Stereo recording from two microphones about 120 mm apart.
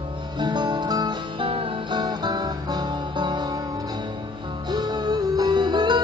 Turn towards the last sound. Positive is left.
turn(degrees=-40)  # may be behind; listen again after turning